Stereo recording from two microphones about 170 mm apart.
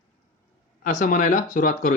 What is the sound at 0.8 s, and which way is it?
Speech, 50° left (ahead or behind).